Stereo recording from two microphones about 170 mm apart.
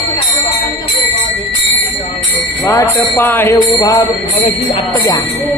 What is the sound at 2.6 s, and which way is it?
Jingle bell, 15° left (ahead or behind).